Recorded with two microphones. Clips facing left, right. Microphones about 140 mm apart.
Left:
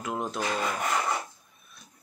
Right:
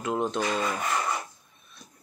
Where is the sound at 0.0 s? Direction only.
Centre (ahead or behind).